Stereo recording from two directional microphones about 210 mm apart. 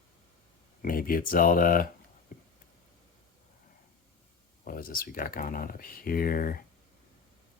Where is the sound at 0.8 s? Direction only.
45° left (ahead or behind).